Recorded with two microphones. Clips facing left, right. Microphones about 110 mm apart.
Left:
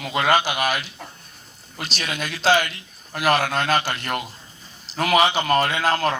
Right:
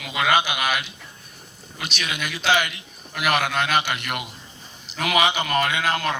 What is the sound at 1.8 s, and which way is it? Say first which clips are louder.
A man's voice: left 1 dB; 35° left (ahead or behind).